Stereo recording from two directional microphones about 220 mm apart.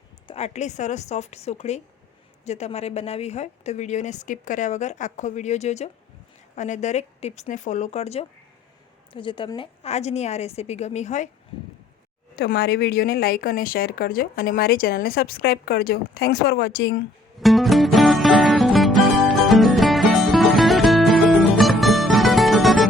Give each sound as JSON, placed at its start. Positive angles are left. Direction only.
{"t": 0.3, "sound": "a woman's voice", "side_deg": 30}
{"t": 12.4, "sound": "a woman's voice", "side_deg": 45}
{"t": 17.4, "sound": "music", "side_deg": 0}